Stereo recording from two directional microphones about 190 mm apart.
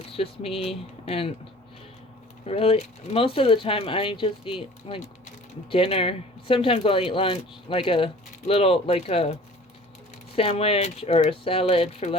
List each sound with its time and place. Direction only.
0.0 s speech: 30° left (ahead or behind)
2.4 s speech: 30° left (ahead or behind)